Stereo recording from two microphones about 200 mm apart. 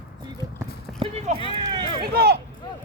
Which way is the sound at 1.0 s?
30° right (ahead or behind).